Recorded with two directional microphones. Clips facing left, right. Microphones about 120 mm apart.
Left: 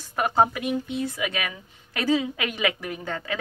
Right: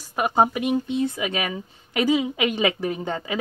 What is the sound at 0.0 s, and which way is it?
A woman's voice, 15° right (ahead or behind).